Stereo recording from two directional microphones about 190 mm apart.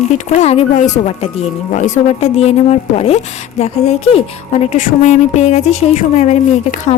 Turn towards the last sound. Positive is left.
turn(degrees=40)  # may be behind; listen again after turning